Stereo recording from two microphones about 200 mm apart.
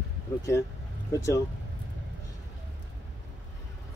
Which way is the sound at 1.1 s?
15° left (ahead or behind).